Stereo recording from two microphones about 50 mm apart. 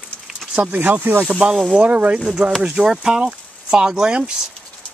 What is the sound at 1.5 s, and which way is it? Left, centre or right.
Speech, centre.